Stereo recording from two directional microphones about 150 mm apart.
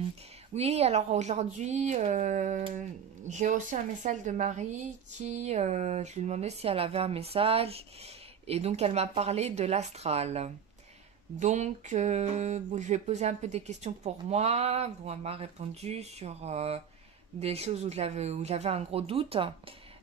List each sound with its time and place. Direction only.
0.6 s a woman's voice: 45° right (ahead or behind)